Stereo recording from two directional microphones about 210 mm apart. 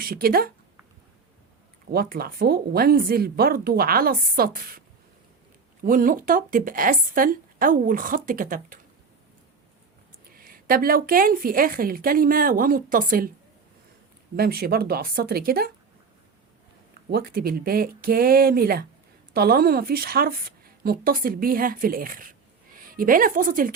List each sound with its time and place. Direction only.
0.0 s a woman's voice: 45° right (ahead or behind)
1.9 s a woman's voice: 45° right (ahead or behind)
5.8 s speech: 40° right (ahead or behind)
10.3 s a woman's voice: 45° right (ahead or behind)
14.3 s a woman's voice: 50° right (ahead or behind)
17.1 s a woman's voice: 45° right (ahead or behind)